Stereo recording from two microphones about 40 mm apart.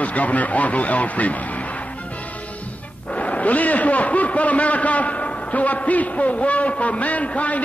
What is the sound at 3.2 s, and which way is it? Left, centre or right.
Speech, left.